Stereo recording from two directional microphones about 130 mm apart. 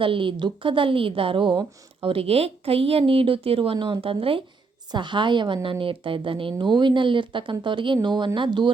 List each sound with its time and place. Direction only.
0.0 s a woman's voice: 40° right (ahead or behind)